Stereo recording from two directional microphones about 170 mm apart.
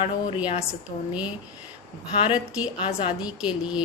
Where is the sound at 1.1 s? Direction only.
5° right (ahead or behind).